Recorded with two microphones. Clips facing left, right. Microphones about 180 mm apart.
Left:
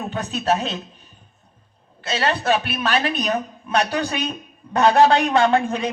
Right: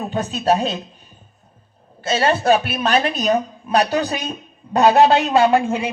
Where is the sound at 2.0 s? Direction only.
45° right (ahead or behind).